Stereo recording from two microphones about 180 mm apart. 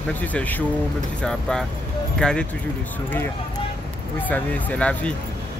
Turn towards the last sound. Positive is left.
turn(degrees=5)  # may be behind; listen again after turning